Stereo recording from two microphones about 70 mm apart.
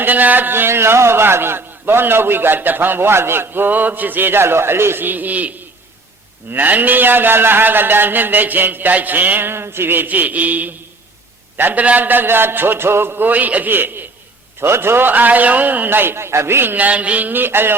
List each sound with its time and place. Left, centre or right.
0.0 s a man's voice: right
16.7 s a man's voice: right